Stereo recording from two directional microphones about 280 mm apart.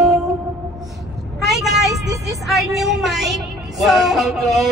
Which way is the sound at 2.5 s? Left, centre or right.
Centre.